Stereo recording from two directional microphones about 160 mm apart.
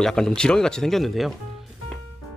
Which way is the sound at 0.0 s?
5° left (ahead or behind).